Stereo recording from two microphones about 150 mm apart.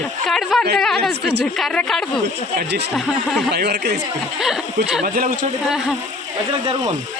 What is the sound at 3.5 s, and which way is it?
Speech, 90° right.